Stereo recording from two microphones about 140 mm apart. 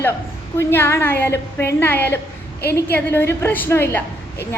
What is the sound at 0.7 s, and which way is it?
A woman's voice, 15° left (ahead or behind).